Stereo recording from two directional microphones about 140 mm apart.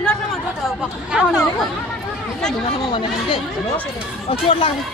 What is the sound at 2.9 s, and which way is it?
Speech, 35° left (ahead or behind).